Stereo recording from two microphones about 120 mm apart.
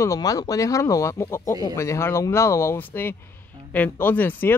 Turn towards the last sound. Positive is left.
turn(degrees=15)  # may be behind; listen again after turning